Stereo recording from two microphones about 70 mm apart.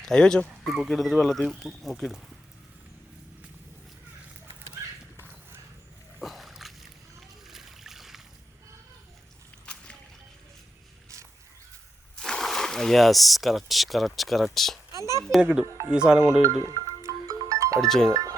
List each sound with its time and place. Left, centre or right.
0.0 s speech: centre
0.9 s speech: centre
5.1 s horse: right
6.2 s a sound: centre
7.2 s splash: centre
9.7 s a sound: centre
12.1 s speech: centre
14.9 s a sound: right
15.4 s speech: centre
16.4 s music: right
17.7 s speech: centre
18.1 s speech: right